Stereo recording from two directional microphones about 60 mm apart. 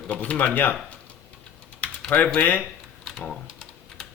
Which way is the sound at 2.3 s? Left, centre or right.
Left.